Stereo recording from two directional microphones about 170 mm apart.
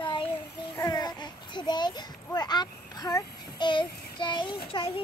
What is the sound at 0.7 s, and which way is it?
A child's voice, 20° left (ahead or behind).